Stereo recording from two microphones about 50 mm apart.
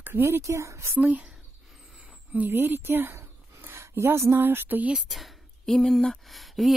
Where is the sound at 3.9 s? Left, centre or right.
Right.